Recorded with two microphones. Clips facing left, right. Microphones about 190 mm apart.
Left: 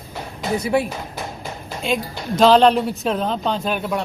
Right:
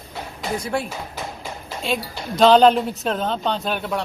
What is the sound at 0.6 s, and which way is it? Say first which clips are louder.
Speech: left 7 dB; 5° left (ahead or behind).